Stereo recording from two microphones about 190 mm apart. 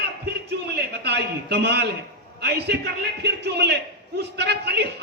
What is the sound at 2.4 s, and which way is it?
A man's voice, 60° right (ahead or behind).